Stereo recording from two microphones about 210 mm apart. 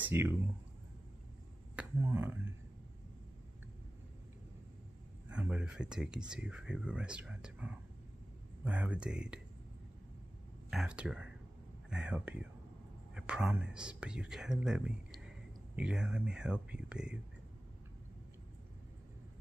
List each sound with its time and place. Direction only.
0.0 s speech: 10° right (ahead or behind)
1.8 s speech: 10° right (ahead or behind)
5.3 s speech: 5° right (ahead or behind)
10.7 s speech: 5° right (ahead or behind)